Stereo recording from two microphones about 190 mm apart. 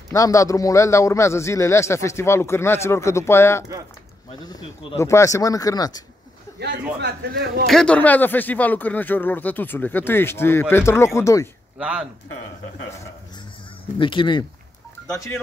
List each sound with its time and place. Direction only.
0.1 s a man's voice: 15° left (ahead or behind)
4.9 s a man's voice: 15° left (ahead or behind)
6.6 s a man's voice: 60° right (ahead or behind)
7.6 s a man's voice: 5° left (ahead or behind)
11.8 s a man's voice: 5° right (ahead or behind)
13.9 s speech: 25° left (ahead or behind)
15.1 s a man's voice: 15° left (ahead or behind)